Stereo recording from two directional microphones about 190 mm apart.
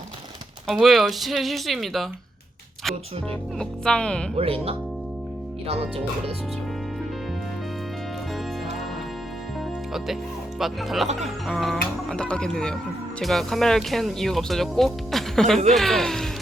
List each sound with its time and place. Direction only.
0.7 s speech: centre (ahead or behind)
3.6 s speech: 5° left (ahead or behind)
4.4 s speech: 30° right (ahead or behind)
10.6 s speech: centre (ahead or behind)